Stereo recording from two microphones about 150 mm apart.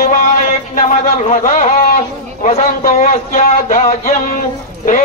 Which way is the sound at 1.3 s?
55° left (ahead or behind).